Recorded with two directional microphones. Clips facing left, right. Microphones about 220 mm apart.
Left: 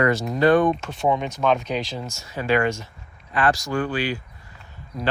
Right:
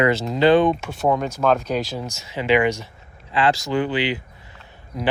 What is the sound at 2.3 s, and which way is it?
Speech, 20° right (ahead or behind).